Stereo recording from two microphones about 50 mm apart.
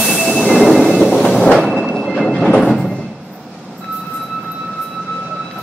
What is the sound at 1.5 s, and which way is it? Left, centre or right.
Reversing beeps, centre.